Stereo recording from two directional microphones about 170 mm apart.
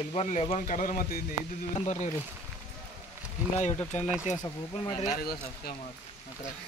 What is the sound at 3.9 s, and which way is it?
Speech, 45° left (ahead or behind).